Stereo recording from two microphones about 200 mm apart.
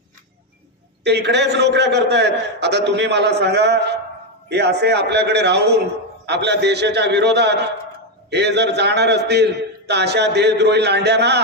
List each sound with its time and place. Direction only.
1.0 s a man's voice: 60° right (ahead or behind)